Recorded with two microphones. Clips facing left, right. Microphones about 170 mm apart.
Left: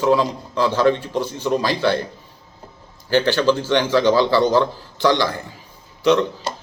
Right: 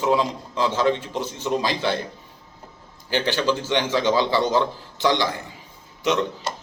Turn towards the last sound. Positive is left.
turn(degrees=30)  # may be behind; listen again after turning